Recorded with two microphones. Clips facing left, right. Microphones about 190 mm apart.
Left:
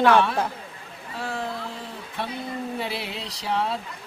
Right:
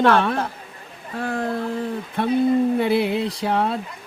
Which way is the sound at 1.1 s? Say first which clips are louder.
Right 6 dB; 55° right (ahead or behind).